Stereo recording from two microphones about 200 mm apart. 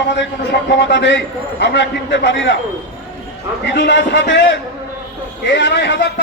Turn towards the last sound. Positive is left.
turn(degrees=60)  # may be behind; listen again after turning